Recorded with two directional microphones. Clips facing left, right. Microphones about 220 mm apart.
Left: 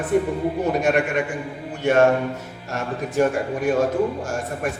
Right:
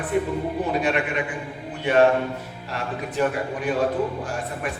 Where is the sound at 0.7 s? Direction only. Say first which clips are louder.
Left 3 dB; 45° left (ahead or behind).